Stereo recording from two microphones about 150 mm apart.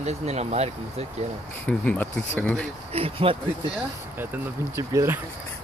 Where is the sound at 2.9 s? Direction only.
40° right (ahead or behind).